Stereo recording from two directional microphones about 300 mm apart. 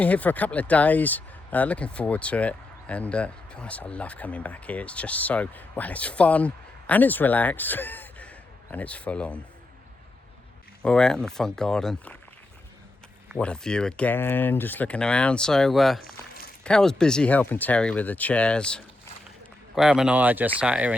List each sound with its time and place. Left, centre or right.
0.0 s speech: centre
10.8 s speech: centre
13.3 s speech: centre
16.0 s a sound: left
16.6 s speech: centre